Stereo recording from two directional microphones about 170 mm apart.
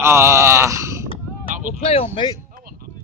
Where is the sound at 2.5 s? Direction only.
60° right (ahead or behind).